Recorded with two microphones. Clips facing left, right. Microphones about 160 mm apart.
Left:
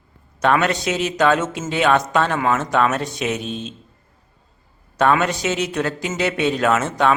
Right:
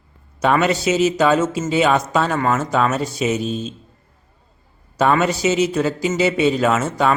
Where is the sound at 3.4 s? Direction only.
40° right (ahead or behind).